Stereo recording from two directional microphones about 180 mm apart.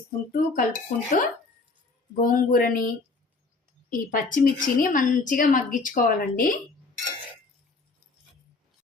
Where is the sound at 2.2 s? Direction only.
50° left (ahead or behind).